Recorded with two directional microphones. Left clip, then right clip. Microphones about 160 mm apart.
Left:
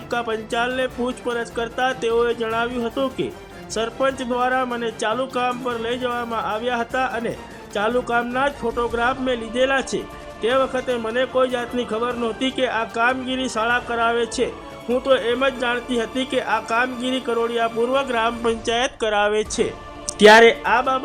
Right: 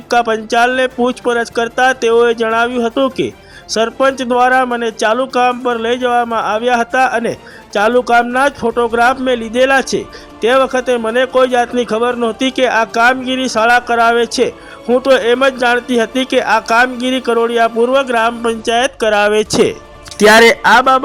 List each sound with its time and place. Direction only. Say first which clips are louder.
0.1 s a man's voice: right 11 dB; 45° right (ahead or behind); by 21.0 s 65° right (ahead or behind)